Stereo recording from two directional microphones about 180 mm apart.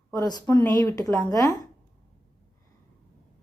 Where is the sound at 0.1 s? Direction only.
20° left (ahead or behind).